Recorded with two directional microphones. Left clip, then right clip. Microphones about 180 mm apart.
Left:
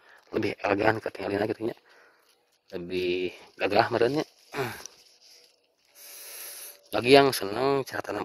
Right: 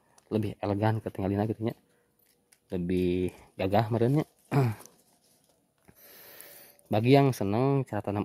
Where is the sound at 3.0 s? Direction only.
Centre (ahead or behind).